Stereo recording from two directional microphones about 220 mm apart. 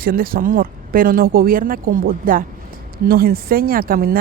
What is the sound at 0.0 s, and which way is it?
Speech, 40° right (ahead or behind).